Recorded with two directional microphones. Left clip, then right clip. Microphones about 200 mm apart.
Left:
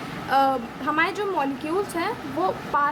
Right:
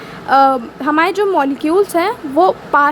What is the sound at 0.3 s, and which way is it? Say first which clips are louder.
Speech: right 10 dB; 40° right (ahead or behind).